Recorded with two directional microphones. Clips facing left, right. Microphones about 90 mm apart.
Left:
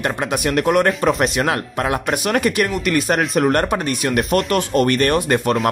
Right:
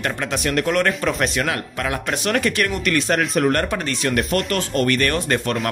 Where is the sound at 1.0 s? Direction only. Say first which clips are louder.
Left 4 dB; 35° left (ahead or behind).